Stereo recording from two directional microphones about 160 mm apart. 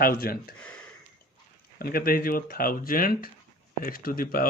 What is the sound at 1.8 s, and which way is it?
Speech, 65° left (ahead or behind).